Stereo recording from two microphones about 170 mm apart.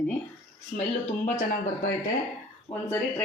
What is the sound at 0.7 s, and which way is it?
Speech, 50° left (ahead or behind).